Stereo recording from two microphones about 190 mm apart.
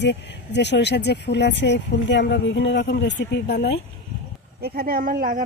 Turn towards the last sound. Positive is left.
turn(degrees=-45)  # may be behind; listen again after turning